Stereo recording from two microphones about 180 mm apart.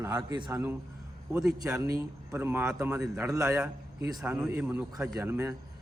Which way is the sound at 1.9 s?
15° right (ahead or behind).